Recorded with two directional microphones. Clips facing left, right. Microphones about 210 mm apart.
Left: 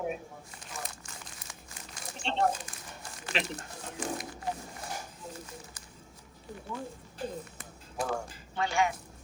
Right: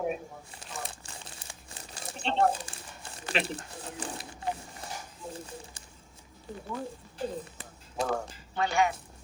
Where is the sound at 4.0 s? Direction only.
35° right (ahead or behind).